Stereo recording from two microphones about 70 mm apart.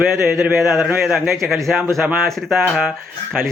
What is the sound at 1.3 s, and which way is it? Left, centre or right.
A man's voice, centre.